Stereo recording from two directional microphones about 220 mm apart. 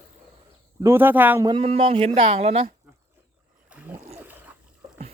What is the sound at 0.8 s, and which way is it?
Speech, 10° right (ahead or behind).